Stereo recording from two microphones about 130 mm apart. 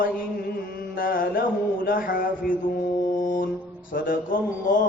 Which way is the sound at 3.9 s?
90° left.